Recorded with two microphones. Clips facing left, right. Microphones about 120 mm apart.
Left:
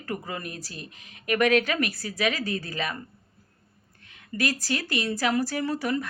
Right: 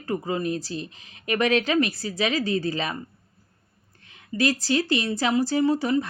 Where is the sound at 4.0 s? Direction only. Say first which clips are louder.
Right 1 dB; 30° right (ahead or behind).